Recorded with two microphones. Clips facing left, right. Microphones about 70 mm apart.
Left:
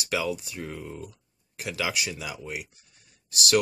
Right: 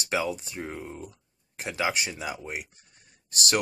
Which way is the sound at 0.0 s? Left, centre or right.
Right.